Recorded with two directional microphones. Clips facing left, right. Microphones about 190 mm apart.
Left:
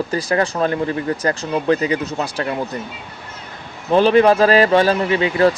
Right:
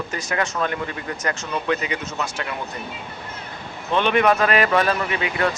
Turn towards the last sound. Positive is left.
turn(degrees=30)  # may be behind; listen again after turning